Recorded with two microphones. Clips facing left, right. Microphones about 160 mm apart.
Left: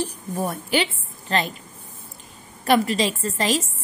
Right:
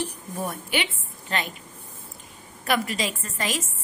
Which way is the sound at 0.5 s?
35° left (ahead or behind).